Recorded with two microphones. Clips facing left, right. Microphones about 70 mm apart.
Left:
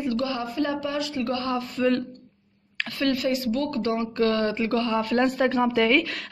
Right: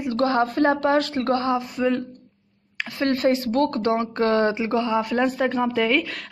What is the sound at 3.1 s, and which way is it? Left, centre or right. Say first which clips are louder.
Speech: right 5 dB; right.